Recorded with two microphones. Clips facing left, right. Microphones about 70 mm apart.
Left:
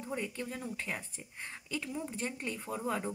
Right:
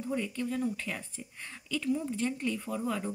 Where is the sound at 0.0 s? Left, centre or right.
Left.